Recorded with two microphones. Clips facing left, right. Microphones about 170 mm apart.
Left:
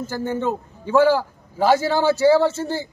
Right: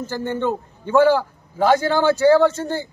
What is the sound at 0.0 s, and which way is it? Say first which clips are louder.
A man's voice: right 1 dB; 5° left (ahead or behind).